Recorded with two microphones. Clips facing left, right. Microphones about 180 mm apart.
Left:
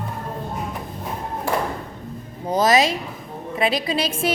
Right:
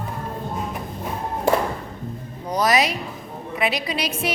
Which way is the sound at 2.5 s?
25° left (ahead or behind).